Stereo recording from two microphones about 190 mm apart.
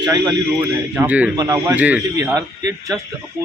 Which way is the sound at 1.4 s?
20° right (ahead or behind).